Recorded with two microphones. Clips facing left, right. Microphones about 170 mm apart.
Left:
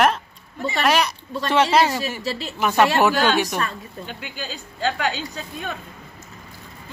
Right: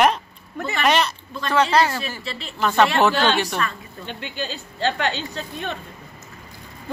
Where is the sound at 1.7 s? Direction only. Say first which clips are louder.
Left 1 dB; 20° left (ahead or behind).